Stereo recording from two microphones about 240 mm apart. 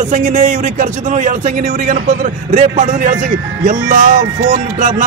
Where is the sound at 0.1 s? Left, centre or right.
Right.